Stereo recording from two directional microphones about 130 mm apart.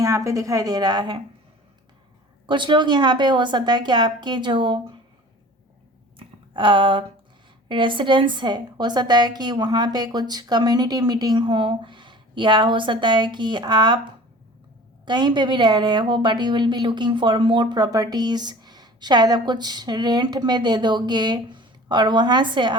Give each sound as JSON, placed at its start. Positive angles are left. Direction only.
{"t": 0.0, "sound": "a woman's voice", "side_deg": -25}
{"t": 2.5, "sound": "a woman's voice", "side_deg": -35}
{"t": 6.1, "sound": "a sound", "side_deg": -40}
{"t": 7.7, "sound": "a woman's voice", "side_deg": -40}